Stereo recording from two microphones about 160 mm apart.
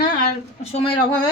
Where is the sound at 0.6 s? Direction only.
40° left (ahead or behind).